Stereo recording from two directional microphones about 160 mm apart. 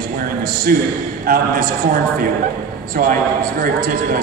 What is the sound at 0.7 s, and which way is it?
Speech, 65° right (ahead or behind).